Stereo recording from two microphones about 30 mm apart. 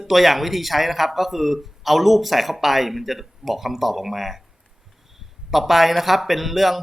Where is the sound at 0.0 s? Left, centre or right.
Centre.